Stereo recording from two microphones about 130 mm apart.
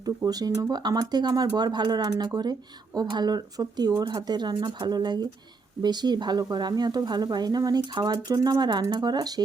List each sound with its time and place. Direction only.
0.3 s speech: 30° right (ahead or behind)